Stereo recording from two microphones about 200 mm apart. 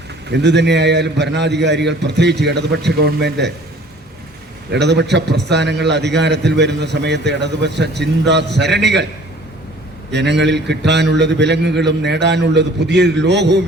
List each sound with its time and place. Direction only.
0.3 s a man's voice: 60° right (ahead or behind)
4.7 s a man's voice: 60° right (ahead or behind)
10.1 s a man's voice: 60° right (ahead or behind)